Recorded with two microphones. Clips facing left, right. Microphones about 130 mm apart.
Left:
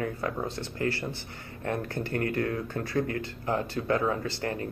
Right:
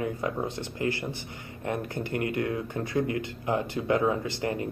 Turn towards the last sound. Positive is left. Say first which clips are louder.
# right 2 dB
turn(degrees=-20)  # may be behind; listen again after turning